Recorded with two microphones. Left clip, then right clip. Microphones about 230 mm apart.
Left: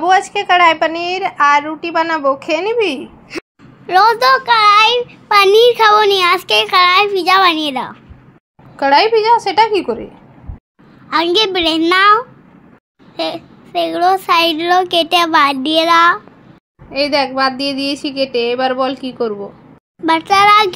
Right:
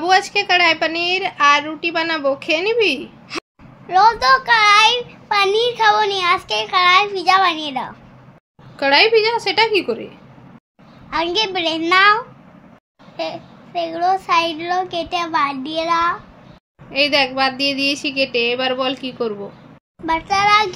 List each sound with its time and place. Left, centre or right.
0.0 s a woman's voice: centre
0.7 s a woman's voice: centre
3.8 s a child's voice: left
8.7 s a woman's voice: centre
11.1 s a child's voice: left
16.9 s a woman's voice: centre
20.1 s a child's voice: left